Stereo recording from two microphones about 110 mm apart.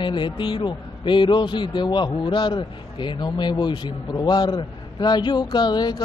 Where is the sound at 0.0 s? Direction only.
45° left (ahead or behind).